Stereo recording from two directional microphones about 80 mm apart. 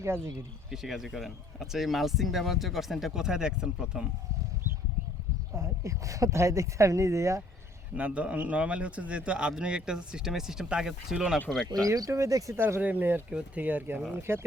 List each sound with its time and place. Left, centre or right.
0.7 s speech: centre
5.5 s speech: right
7.9 s speech: centre
11.9 s speech: right
12.5 s speech: right